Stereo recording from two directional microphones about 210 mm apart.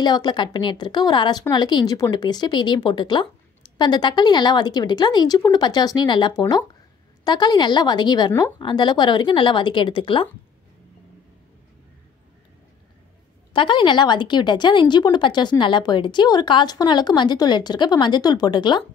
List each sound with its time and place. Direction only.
0.0 s a woman's voice: 20° left (ahead or behind)
8.5 s a woman's voice: 20° left (ahead or behind)
13.5 s a woman's voice: 25° left (ahead or behind)